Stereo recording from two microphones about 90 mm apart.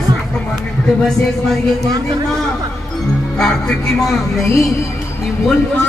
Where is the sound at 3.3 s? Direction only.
5° left (ahead or behind).